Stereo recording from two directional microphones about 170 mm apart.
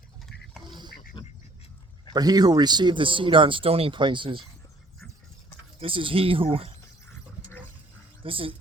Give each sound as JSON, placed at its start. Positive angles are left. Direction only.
{"t": 2.1, "sound": "speech", "side_deg": -25}
{"t": 5.8, "sound": "speech", "side_deg": -30}
{"t": 8.2, "sound": "speech", "side_deg": -30}